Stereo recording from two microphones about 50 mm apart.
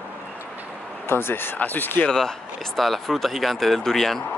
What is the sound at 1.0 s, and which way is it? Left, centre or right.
Speech, left.